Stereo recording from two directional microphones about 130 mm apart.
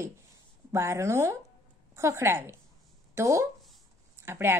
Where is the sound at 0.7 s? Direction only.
20° right (ahead or behind).